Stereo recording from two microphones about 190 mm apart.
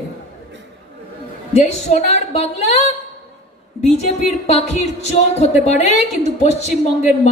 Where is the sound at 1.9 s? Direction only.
35° left (ahead or behind).